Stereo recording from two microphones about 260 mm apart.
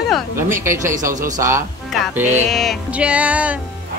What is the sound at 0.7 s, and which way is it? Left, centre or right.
Speech, right.